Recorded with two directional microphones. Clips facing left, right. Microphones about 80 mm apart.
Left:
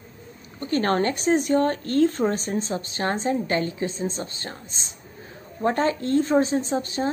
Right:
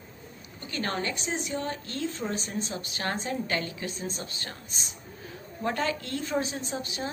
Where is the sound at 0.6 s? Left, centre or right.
Left.